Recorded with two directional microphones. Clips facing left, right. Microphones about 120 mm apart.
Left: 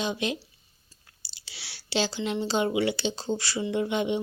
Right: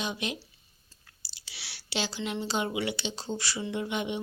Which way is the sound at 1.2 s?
30° left (ahead or behind).